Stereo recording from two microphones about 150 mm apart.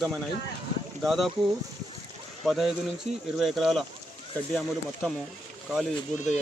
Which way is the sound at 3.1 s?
45° right (ahead or behind).